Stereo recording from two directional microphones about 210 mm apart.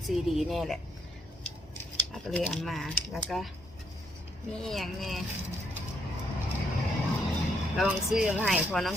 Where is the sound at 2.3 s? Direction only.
Centre (ahead or behind).